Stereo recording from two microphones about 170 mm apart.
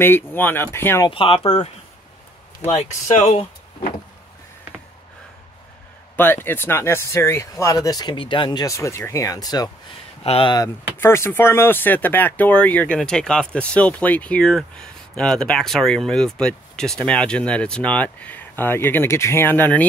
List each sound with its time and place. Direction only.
0.0 s speech: 10° left (ahead or behind)
1.0 s speech: 30° left (ahead or behind)
2.6 s speech: 40° left (ahead or behind)
6.1 s speech: 10° left (ahead or behind)
11.0 s speech: 15° left (ahead or behind)